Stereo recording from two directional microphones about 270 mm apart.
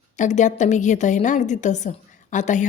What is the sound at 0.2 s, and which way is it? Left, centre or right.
A woman's voice, left.